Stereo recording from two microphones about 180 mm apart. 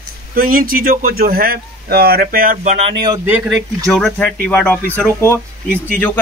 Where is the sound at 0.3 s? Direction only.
55° right (ahead or behind).